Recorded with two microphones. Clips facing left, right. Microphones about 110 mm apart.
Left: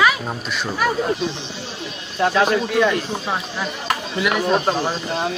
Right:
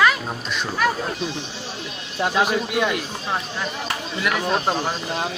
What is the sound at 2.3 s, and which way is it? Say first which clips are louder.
Speech: left 2 dB; 10° right (ahead or behind).